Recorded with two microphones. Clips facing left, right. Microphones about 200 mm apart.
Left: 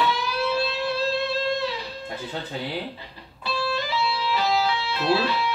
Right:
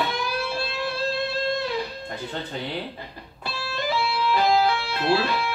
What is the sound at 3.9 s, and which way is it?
Music, 50° right (ahead or behind).